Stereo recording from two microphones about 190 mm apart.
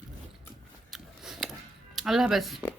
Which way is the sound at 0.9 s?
Centre (ahead or behind).